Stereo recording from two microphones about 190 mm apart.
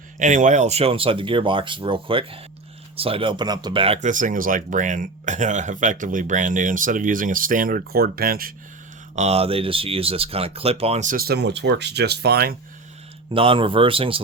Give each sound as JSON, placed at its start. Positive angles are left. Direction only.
{"t": 0.2, "sound": "speech", "side_deg": -40}
{"t": 9.1, "sound": "speech", "side_deg": -35}
{"t": 13.3, "sound": "speech", "side_deg": -30}